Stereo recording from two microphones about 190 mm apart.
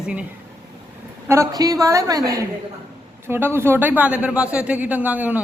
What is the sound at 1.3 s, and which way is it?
A woman's voice, 15° right (ahead or behind).